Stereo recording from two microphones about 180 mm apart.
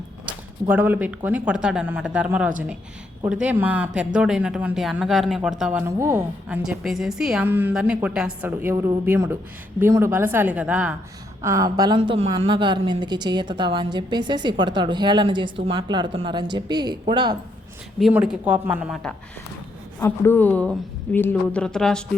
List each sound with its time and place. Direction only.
0.7 s speech: 10° right (ahead or behind)
6.6 s speech: centre (ahead or behind)
11.4 s a woman's voice: 20° right (ahead or behind)
18.0 s speech: 5° right (ahead or behind)
20.0 s speech: 10° left (ahead or behind)